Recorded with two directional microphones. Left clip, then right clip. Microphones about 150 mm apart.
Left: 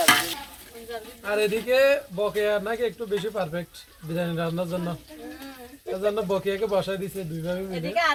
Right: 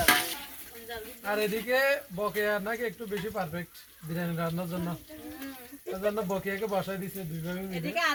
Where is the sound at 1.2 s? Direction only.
20° left (ahead or behind).